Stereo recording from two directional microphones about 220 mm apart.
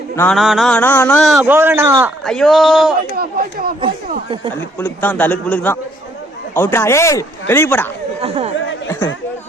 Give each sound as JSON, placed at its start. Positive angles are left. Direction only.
{"t": 0.2, "sound": "a man's voice", "side_deg": 0}
{"t": 2.2, "sound": "a man's voice", "side_deg": 0}
{"t": 3.1, "sound": "speech", "side_deg": -40}
{"t": 4.8, "sound": "speech", "side_deg": 10}
{"t": 8.2, "sound": "speech", "side_deg": -30}